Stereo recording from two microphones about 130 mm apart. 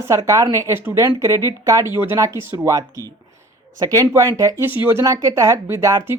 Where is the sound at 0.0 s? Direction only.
25° right (ahead or behind).